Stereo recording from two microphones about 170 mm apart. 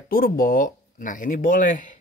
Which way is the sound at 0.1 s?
60° left (ahead or behind).